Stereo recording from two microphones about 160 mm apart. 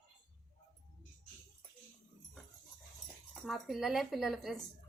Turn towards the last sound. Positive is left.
turn(degrees=0)  # may be behind; listen again after turning